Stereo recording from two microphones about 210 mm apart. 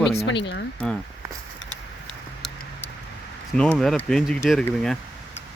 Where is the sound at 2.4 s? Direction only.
Centre (ahead or behind).